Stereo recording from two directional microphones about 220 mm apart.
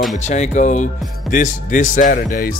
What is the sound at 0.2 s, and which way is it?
Speech, 30° left (ahead or behind).